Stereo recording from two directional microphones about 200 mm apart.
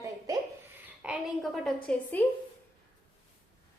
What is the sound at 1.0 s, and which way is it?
A woman's voice, 5° right (ahead or behind).